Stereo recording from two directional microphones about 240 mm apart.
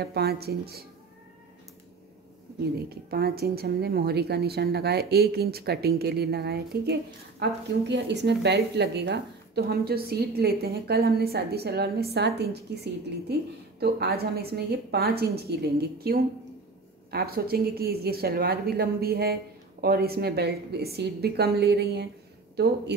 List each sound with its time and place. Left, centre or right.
0.0 s a woman's voice: right
2.9 s a woman's voice: right